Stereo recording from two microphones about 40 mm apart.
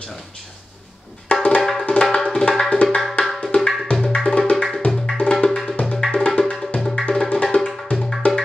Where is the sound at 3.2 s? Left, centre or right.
Left.